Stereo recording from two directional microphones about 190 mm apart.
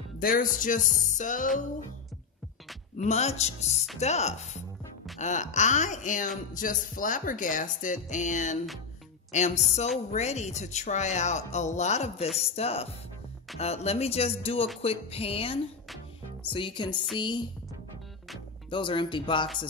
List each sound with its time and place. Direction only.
0.2 s speech: 45° left (ahead or behind)
3.0 s music: 35° left (ahead or behind)
14.8 s speech: 30° left (ahead or behind)
18.7 s speech: 25° left (ahead or behind)